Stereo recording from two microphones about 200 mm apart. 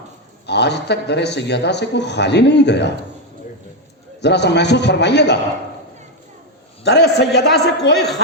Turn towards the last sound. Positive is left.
turn(degrees=55)  # may be behind; listen again after turning